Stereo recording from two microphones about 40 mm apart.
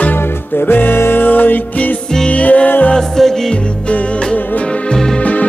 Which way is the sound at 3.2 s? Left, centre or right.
Centre.